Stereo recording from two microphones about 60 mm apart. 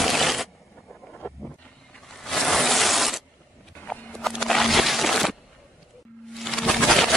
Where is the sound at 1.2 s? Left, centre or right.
Left.